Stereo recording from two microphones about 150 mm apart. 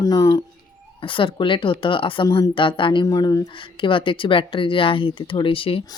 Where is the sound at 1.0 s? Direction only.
35° left (ahead or behind).